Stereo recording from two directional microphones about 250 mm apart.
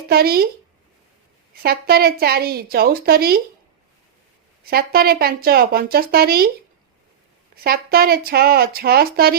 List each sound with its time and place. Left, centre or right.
0.1 s speech: right
1.6 s speech: right
4.7 s speech: right
7.5 s speech: right